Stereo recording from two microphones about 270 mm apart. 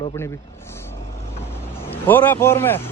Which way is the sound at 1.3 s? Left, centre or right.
Centre.